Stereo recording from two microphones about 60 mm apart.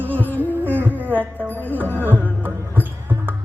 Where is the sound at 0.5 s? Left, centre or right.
Right.